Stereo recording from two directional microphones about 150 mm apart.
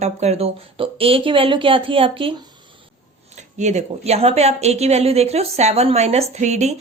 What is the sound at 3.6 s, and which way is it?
A woman's voice, 50° right (ahead or behind).